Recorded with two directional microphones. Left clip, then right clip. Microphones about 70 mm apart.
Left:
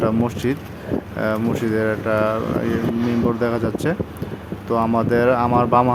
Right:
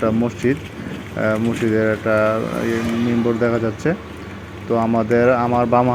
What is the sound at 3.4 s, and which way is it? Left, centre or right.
Speech, right.